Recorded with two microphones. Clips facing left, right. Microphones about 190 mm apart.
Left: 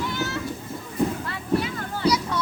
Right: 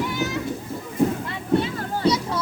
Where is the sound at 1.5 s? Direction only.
25° right (ahead or behind).